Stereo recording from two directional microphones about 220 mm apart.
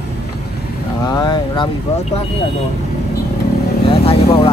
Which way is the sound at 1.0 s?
20° left (ahead or behind).